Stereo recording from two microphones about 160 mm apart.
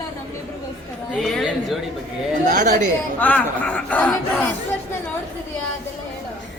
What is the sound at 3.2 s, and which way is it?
Speech, 10° left (ahead or behind).